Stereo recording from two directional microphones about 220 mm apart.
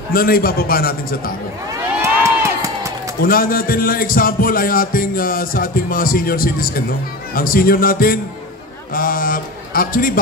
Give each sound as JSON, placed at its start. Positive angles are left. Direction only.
{"t": 0.1, "sound": "a man's voice", "side_deg": 40}
{"t": 2.0, "sound": "crowd", "side_deg": -15}
{"t": 3.2, "sound": "a man's voice", "side_deg": 40}